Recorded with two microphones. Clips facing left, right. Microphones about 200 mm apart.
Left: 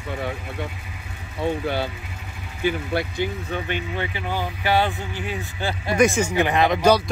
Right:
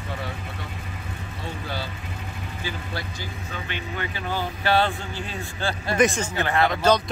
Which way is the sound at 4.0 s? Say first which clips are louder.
Left 2 dB; 15° left (ahead or behind).